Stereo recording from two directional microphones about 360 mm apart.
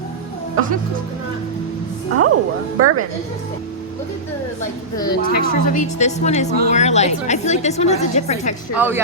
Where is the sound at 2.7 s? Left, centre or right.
Right.